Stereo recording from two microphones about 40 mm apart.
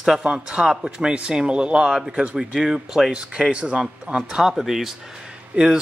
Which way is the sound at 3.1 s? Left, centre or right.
Right.